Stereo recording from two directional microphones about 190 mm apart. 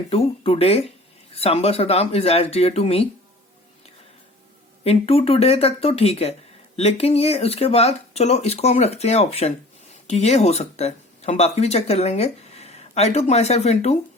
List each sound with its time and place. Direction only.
0.1 s speech: 30° left (ahead or behind)
4.8 s speech: 30° left (ahead or behind)